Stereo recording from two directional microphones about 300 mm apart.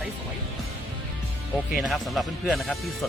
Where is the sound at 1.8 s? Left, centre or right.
Centre.